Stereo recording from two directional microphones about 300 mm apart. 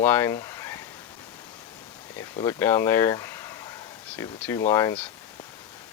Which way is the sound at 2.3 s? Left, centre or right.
Centre.